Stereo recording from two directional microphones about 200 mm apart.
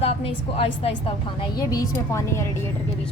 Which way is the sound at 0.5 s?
30° left (ahead or behind).